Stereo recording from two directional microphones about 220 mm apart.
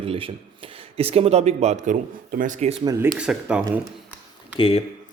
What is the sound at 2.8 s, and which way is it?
Speech, 15° right (ahead or behind).